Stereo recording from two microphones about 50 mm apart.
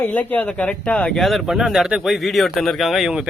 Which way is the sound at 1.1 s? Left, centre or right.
Centre.